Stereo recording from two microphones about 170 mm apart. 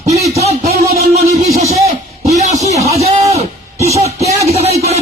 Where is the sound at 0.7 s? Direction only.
65° right (ahead or behind).